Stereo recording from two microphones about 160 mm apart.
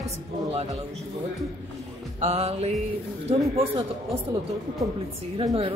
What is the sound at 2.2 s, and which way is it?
Speech, 40° right (ahead or behind).